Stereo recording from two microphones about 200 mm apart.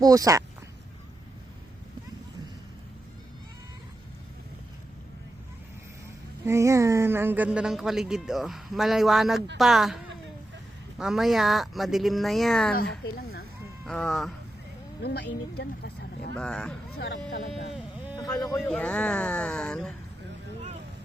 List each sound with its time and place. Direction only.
0.0 s speech: 15° right (ahead or behind)
6.4 s speech: 15° right (ahead or behind); by 12.7 s centre (ahead or behind)
13.8 s speech: 5° left (ahead or behind)
15.0 s speech: 55° left (ahead or behind)
16.3 s speech: 5° left (ahead or behind)
17.0 s speech: 55° left (ahead or behind)
17.7 s a sound: 10° right (ahead or behind)
18.2 s speech: 20° left (ahead or behind)
18.5 s speech: 5° left (ahead or behind)